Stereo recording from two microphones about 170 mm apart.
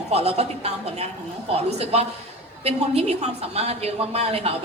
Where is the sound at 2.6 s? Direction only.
40° right (ahead or behind).